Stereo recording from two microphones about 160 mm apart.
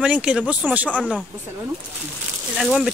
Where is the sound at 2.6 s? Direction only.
Centre (ahead or behind).